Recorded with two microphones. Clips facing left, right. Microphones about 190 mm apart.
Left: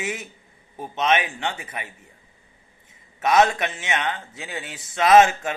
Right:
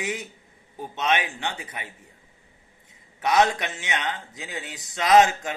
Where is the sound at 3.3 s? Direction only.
70° left (ahead or behind).